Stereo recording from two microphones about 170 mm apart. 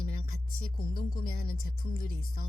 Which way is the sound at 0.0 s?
60° left (ahead or behind).